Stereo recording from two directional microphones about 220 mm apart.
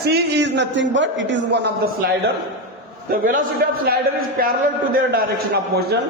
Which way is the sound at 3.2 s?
40° right (ahead or behind).